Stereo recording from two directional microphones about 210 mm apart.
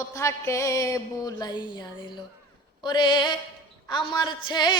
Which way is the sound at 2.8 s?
20° left (ahead or behind).